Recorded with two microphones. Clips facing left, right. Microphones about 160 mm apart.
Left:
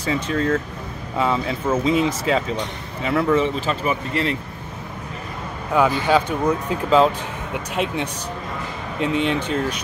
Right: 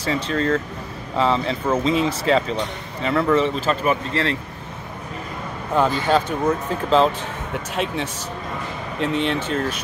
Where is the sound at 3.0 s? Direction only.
10° left (ahead or behind).